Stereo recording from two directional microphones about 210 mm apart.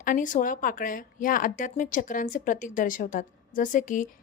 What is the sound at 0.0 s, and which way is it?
Speech, 40° left (ahead or behind).